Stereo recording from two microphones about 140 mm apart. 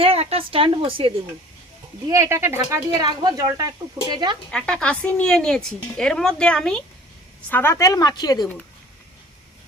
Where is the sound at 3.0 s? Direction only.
30° right (ahead or behind).